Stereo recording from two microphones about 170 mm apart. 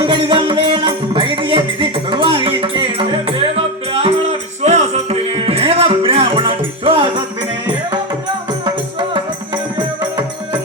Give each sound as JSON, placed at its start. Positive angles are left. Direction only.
{"t": 0.0, "sound": "music", "side_deg": -30}
{"t": 8.6, "sound": "music", "side_deg": -30}